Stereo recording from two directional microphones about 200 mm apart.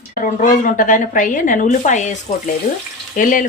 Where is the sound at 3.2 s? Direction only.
45° left (ahead or behind).